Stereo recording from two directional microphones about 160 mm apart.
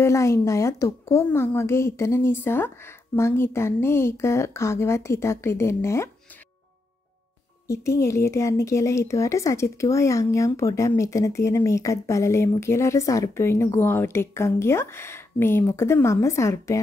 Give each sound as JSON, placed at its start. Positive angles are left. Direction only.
{"t": 0.0, "sound": "a woman's voice", "side_deg": 20}
{"t": 7.6, "sound": "a woman's voice", "side_deg": 20}